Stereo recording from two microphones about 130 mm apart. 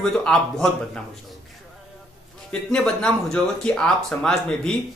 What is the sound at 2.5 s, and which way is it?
Speech, 5° left (ahead or behind).